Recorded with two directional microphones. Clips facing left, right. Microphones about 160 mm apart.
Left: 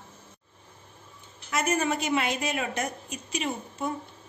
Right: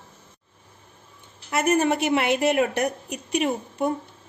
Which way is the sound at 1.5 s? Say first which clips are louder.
Right 6 dB; 60° right (ahead or behind).